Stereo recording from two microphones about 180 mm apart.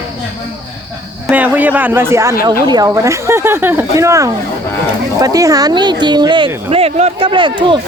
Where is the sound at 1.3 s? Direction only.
10° right (ahead or behind); by 6.5 s 25° right (ahead or behind).